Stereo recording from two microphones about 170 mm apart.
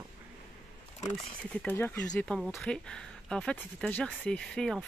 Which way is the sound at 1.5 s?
10° left (ahead or behind).